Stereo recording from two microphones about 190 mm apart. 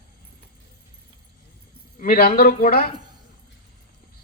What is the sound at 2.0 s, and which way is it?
Speech, 50° left (ahead or behind).